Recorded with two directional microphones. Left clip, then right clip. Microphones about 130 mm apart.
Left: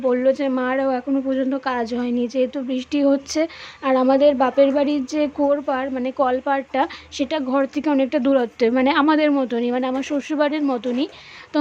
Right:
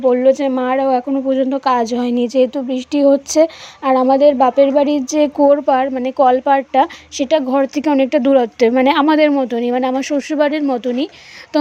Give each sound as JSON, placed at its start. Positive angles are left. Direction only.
{"t": 0.1, "sound": "speech", "side_deg": -20}
{"t": 2.6, "sound": "speech", "side_deg": -20}
{"t": 4.0, "sound": "speech", "side_deg": -10}
{"t": 9.3, "sound": "speech", "side_deg": -15}
{"t": 9.7, "sound": "speech", "side_deg": -25}